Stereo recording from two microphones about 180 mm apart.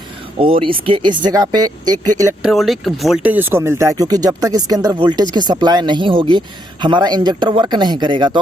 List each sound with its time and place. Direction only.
0.3 s speech: 30° right (ahead or behind)
2.4 s speech: centre (ahead or behind); by 8.4 s 25° right (ahead or behind)